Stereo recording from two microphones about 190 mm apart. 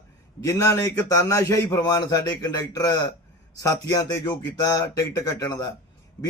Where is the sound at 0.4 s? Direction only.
15° left (ahead or behind).